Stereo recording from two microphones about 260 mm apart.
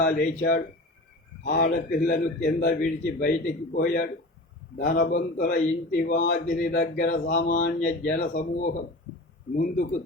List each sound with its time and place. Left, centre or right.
0.0 s a man's voice: left